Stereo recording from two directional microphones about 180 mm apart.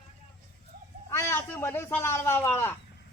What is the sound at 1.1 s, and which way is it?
A man's voice, 15° left (ahead or behind).